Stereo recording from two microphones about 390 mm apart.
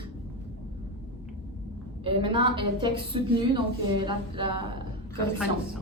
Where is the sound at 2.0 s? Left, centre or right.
Centre.